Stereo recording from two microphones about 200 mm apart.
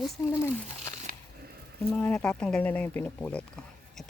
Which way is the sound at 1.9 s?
5° left (ahead or behind).